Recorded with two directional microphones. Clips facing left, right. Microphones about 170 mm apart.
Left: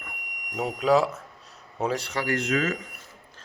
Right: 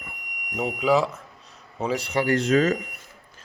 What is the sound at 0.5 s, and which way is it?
Speech, 5° right (ahead or behind).